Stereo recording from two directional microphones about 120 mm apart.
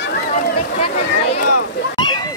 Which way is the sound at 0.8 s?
55° left (ahead or behind).